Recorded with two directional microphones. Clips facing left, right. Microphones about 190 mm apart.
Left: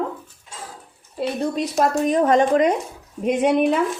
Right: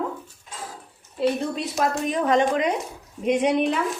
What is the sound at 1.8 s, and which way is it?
Dishes, 45° left (ahead or behind).